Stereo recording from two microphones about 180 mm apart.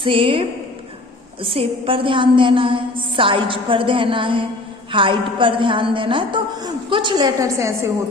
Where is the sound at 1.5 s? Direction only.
30° right (ahead or behind).